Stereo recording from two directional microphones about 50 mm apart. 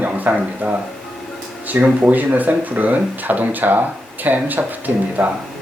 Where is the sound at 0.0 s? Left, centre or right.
Right.